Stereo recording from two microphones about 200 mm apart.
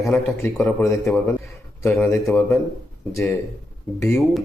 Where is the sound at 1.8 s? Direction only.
10° left (ahead or behind).